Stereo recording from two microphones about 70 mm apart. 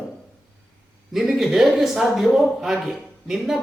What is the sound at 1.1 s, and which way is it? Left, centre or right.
Speech, centre.